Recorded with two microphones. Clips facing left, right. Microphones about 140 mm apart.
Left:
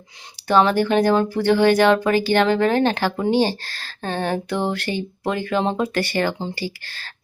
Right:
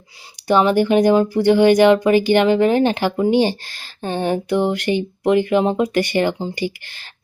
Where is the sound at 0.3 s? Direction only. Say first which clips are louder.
Right 2 dB; 15° right (ahead or behind).